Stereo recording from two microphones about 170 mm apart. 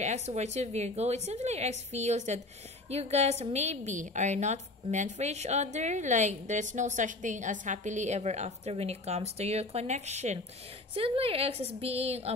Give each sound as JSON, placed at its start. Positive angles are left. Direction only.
{"t": 0.0, "sound": "a woman's voice", "side_deg": -40}